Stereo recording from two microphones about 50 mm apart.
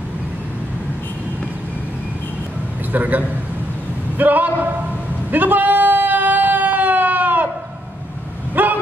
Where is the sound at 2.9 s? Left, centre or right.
Right.